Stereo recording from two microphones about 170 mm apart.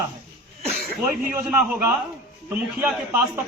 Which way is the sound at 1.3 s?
10° right (ahead or behind).